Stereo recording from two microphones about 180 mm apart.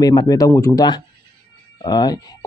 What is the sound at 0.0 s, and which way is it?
A man's voice, 20° left (ahead or behind).